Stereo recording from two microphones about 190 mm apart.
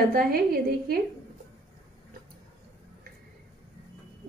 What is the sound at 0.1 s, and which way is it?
Speech, 50° right (ahead or behind).